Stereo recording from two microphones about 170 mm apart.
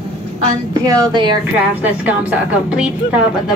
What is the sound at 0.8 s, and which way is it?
Speech, 25° right (ahead or behind).